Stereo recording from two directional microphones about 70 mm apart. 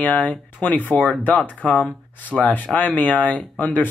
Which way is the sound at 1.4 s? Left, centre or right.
Centre.